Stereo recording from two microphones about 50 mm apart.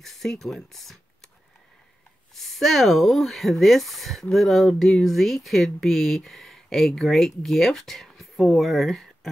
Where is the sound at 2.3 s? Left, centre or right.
Centre.